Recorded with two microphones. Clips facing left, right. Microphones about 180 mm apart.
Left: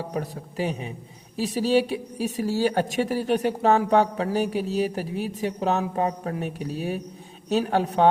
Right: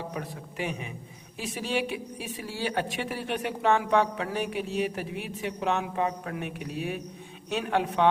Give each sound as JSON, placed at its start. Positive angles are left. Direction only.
{"t": 0.1, "sound": "a woman's voice", "side_deg": 35}